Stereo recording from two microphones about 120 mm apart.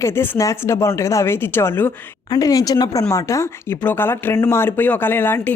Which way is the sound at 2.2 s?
30° left (ahead or behind).